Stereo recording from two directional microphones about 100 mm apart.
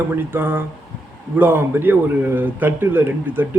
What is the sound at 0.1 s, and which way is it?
A man's voice, 20° right (ahead or behind).